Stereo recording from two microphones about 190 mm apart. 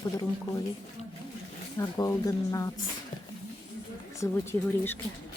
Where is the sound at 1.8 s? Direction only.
20° left (ahead or behind).